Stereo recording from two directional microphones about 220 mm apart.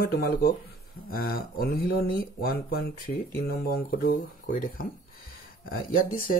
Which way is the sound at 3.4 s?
40° left (ahead or behind).